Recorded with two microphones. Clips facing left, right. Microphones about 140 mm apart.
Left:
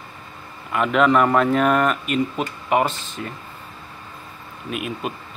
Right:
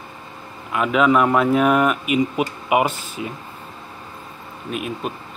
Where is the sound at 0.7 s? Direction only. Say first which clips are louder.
Even; centre (ahead or behind).